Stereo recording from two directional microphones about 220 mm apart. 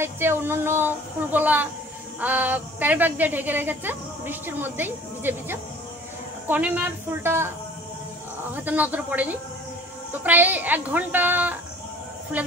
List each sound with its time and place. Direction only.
0.0 s a woman's voice: 10° right (ahead or behind)
8.5 s a woman's voice: 5° right (ahead or behind)